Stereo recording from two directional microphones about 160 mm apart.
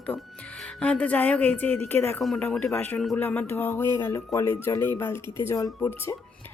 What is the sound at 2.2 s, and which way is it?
Speech, centre (ahead or behind).